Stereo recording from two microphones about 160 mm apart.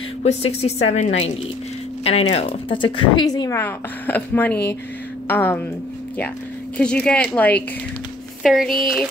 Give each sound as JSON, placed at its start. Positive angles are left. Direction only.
{"t": 0.2, "sound": "a woman's voice", "side_deg": 40}
{"t": 6.8, "sound": "speech", "side_deg": 5}
{"t": 8.4, "sound": "speech", "side_deg": 0}